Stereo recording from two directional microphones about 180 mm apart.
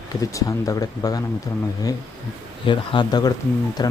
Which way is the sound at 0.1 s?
20° left (ahead or behind).